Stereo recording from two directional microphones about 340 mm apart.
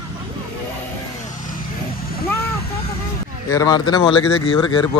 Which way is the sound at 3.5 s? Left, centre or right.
Centre.